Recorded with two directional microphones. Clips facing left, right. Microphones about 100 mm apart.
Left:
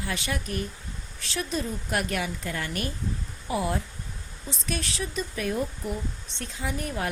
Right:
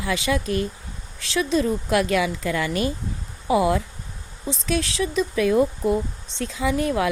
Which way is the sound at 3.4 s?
90° right.